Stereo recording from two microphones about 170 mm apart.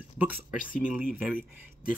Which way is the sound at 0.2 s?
10° right (ahead or behind).